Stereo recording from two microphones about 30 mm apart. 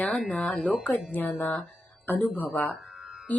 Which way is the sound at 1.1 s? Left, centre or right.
Left.